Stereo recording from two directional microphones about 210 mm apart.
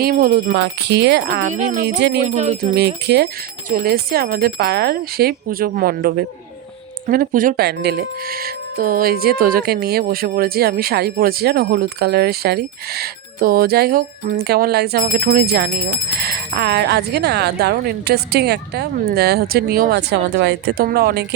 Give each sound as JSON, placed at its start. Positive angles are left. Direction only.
{"t": 0.0, "sound": "speech", "side_deg": -45}
{"t": 0.5, "sound": "speech", "side_deg": -55}
{"t": 1.5, "sound": "speech", "side_deg": -35}
{"t": 2.0, "sound": "speech", "side_deg": -55}
{"t": 2.2, "sound": "speech", "side_deg": -35}
{"t": 2.7, "sound": "speech", "side_deg": -50}